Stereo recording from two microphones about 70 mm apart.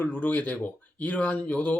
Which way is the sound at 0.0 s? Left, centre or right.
Left.